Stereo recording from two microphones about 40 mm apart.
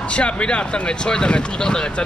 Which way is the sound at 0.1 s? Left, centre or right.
Left.